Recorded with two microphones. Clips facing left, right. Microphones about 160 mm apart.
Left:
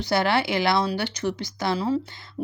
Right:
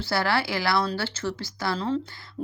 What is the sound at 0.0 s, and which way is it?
Speech, 20° left (ahead or behind).